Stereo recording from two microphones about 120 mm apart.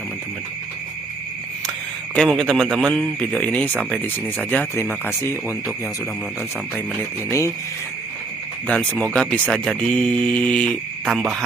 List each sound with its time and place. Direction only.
2.1 s a man's voice: 5° left (ahead or behind); by 5.7 s 20° left (ahead or behind)
7.3 s speech: 25° left (ahead or behind)
8.6 s speech: 10° left (ahead or behind)